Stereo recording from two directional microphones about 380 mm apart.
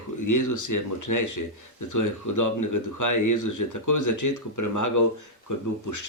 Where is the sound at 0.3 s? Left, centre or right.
Left.